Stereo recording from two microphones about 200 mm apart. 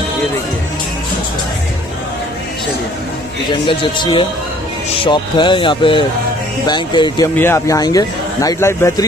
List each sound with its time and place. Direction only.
3.6 s a man's voice: 25° left (ahead or behind)